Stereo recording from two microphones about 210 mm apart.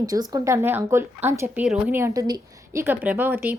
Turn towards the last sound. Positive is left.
turn(degrees=-10)  # may be behind; listen again after turning